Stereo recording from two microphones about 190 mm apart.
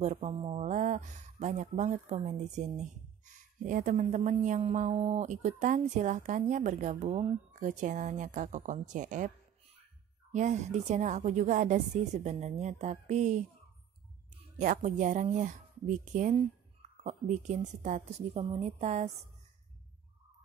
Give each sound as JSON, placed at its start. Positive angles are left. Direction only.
{"t": 0.0, "sound": "speech", "side_deg": -35}
{"t": 10.3, "sound": "speech", "side_deg": -40}
{"t": 14.6, "sound": "speech", "side_deg": -40}